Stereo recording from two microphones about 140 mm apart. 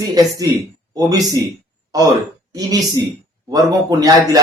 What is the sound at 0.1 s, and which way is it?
Speech, 25° right (ahead or behind).